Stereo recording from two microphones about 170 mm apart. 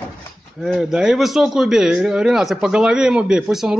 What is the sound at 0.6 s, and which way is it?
Speech, centre (ahead or behind).